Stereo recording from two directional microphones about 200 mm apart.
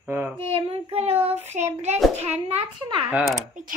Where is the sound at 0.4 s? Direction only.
30° right (ahead or behind).